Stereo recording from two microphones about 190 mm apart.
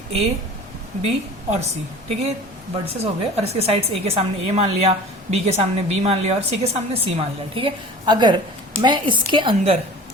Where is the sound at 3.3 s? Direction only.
35° right (ahead or behind).